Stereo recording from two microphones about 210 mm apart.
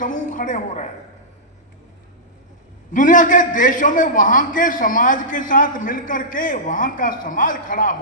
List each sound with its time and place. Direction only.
0.0 s a man's voice: 40° left (ahead or behind)
2.9 s a man's voice: 40° left (ahead or behind)